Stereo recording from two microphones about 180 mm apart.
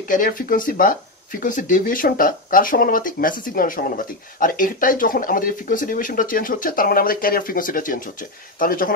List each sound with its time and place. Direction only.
0.1 s speech: 50° left (ahead or behind)